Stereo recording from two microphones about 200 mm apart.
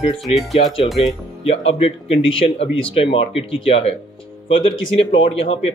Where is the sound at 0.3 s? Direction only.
Centre (ahead or behind).